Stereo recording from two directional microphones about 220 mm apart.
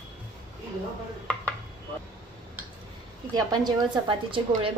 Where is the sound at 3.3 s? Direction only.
20° right (ahead or behind).